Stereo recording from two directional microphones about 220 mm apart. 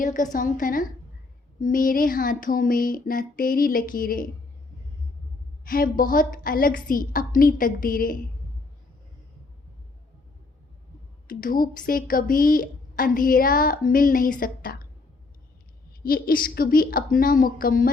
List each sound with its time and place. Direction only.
0.0 s a woman's voice: 35° left (ahead or behind)
5.6 s a woman's voice: 40° left (ahead or behind)
11.3 s a woman's voice: 40° left (ahead or behind)
16.0 s a woman's voice: 40° left (ahead or behind)